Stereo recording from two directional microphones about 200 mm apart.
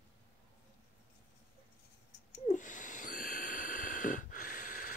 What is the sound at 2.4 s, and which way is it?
Snort, 40° left (ahead or behind).